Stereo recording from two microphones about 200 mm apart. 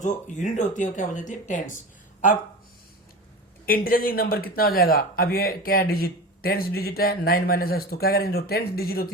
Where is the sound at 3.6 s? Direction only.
45° left (ahead or behind).